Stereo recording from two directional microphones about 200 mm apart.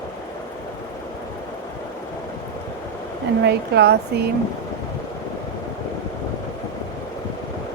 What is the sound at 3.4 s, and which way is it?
Speech, 55° right (ahead or behind).